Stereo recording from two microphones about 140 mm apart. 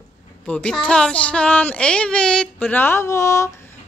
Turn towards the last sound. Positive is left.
turn(degrees=20)  # may be behind; listen again after turning